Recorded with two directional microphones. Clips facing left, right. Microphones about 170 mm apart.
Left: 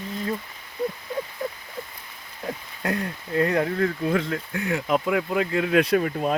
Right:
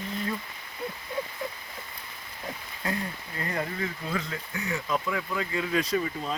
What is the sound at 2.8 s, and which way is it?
Speech, 70° left (ahead or behind).